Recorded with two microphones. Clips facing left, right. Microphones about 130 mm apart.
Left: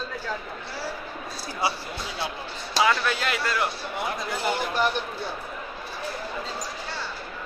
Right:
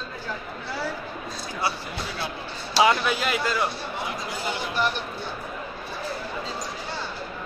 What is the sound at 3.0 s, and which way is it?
Speech, 5° right (ahead or behind).